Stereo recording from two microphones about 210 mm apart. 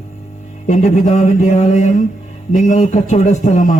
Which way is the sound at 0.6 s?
35° left (ahead or behind).